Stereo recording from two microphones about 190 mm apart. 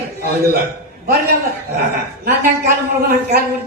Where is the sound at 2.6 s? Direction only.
50° right (ahead or behind).